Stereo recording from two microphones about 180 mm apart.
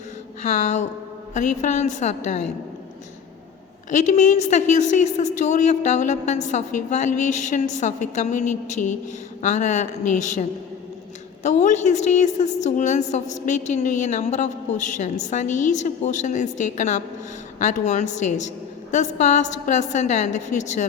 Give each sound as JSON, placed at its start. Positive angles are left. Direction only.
{"t": 0.4, "sound": "a woman's voice", "side_deg": 40}
{"t": 3.9, "sound": "a woman's voice", "side_deg": 40}
{"t": 11.4, "sound": "a woman's voice", "side_deg": 40}